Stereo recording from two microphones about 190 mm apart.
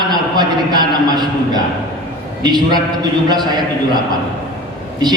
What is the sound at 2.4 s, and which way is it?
Speech, 20° right (ahead or behind).